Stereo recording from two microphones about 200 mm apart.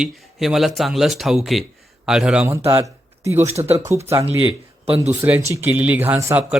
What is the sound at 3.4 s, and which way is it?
Speech, 30° right (ahead or behind).